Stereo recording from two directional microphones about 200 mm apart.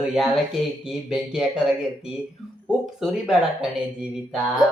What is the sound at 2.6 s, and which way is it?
Speech, centre (ahead or behind).